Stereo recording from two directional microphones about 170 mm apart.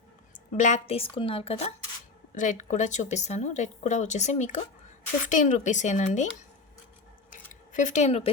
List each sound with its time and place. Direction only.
0.3 s a woman's voice: 45° left (ahead or behind)
2.3 s speech: 45° left (ahead or behind)
7.3 s scissors: 50° left (ahead or behind)